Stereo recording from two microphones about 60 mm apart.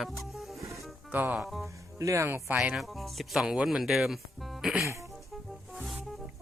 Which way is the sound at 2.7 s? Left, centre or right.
Centre.